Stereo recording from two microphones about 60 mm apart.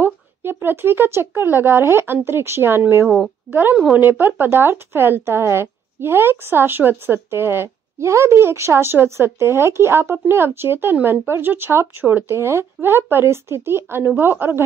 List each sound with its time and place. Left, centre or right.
0.0 s a woman's voice: right
3.9 s a woman's voice: right
12.3 s a woman's voice: right